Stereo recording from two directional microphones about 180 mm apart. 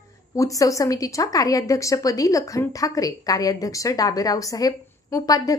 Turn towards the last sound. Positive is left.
turn(degrees=20)  # may be behind; listen again after turning